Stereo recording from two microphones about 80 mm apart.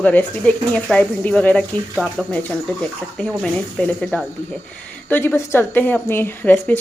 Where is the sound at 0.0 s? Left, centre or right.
Centre.